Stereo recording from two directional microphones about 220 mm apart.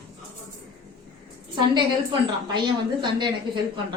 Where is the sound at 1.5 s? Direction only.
20° right (ahead or behind).